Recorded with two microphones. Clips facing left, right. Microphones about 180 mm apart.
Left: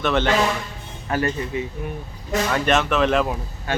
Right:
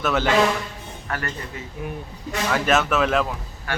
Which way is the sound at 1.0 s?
20° left (ahead or behind).